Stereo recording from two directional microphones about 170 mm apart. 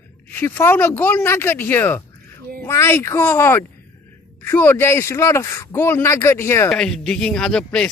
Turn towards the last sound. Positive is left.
turn(degrees=5)  # may be behind; listen again after turning